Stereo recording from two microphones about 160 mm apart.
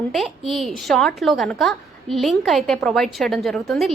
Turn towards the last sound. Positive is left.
turn(degrees=0)  # may be behind; listen again after turning